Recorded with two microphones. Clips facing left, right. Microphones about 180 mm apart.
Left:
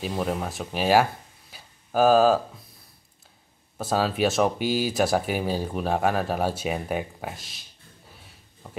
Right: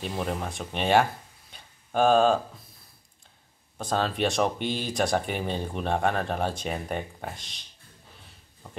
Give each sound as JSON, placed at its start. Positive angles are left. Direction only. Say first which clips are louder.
{"t": 0.2, "sound": "speech", "louder": "left 3 dB", "side_deg": 5}
{"t": 1.5, "sound": "a sound", "louder": "left 3 dB", "side_deg": 5}
{"t": 3.7, "sound": "speech", "louder": "left 3 dB", "side_deg": 5}